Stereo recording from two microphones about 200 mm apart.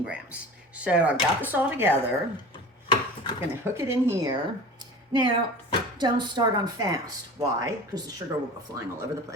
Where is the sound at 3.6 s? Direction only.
15° right (ahead or behind).